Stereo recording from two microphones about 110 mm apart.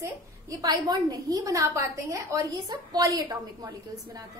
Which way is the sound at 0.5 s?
35° right (ahead or behind).